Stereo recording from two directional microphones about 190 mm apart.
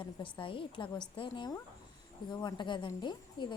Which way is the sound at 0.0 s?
25° left (ahead or behind).